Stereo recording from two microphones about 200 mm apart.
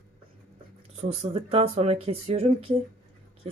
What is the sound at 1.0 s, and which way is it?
Speech, 30° right (ahead or behind).